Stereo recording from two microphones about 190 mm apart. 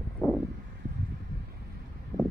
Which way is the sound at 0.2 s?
15° left (ahead or behind).